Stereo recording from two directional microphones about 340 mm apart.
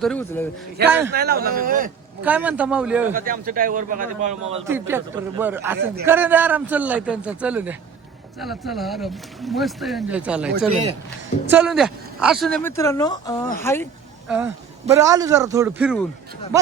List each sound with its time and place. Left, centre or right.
0.0 s speech: centre
0.9 s a man's voice: centre
1.1 s a man's voice: right
2.2 s speech: centre
3.2 s a man's voice: right
4.7 s a man's voice: centre
11.5 s speech: centre
14.3 s a man's voice: centre